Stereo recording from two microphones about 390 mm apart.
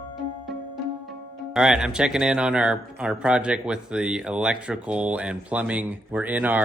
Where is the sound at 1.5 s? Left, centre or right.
Centre.